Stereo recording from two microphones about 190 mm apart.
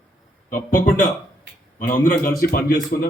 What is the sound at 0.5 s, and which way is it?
A man's voice, 50° left (ahead or behind).